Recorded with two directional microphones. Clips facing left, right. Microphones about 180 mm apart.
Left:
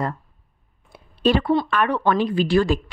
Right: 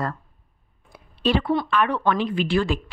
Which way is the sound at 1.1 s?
45° left (ahead or behind).